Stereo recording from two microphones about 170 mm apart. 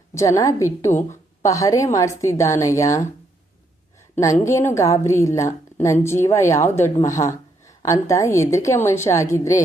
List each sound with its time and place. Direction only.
0.1 s a woman's voice: 20° left (ahead or behind)
4.2 s a woman's voice: 15° left (ahead or behind)